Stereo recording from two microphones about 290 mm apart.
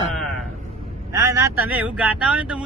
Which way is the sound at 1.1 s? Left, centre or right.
Centre.